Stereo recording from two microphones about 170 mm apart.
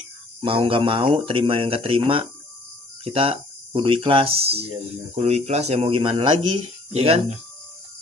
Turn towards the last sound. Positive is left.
turn(degrees=-40)  # may be behind; listen again after turning